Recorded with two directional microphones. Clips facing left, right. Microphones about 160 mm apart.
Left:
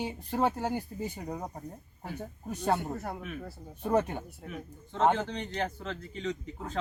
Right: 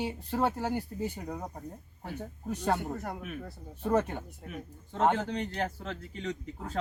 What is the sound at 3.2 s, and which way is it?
Speech, 5° right (ahead or behind).